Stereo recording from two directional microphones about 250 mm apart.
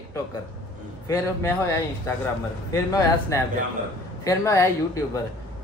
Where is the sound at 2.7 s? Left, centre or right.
Centre.